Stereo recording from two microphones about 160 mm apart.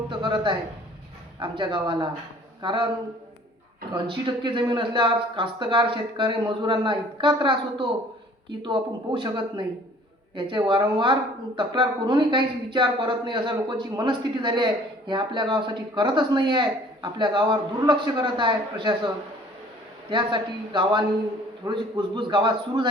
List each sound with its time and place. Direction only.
0.1 s a sound: 30° right (ahead or behind)
1.4 s speech: 30° right (ahead or behind)
3.9 s speech: 30° right (ahead or behind)